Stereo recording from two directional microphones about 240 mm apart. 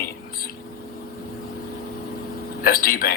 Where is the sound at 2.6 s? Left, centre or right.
Left.